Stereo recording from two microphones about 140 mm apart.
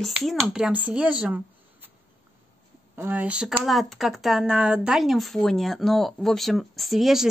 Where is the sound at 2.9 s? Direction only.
15° right (ahead or behind).